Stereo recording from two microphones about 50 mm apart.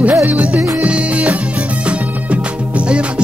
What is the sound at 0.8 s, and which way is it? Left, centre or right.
Music, right.